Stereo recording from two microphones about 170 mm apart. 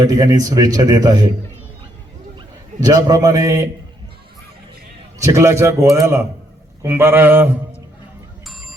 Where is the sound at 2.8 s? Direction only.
20° right (ahead or behind).